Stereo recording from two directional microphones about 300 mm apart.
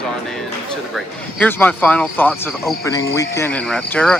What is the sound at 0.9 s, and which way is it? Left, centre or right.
Speech, centre.